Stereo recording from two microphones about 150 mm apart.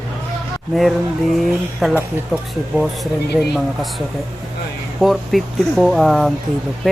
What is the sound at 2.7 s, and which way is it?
Speech, 10° right (ahead or behind).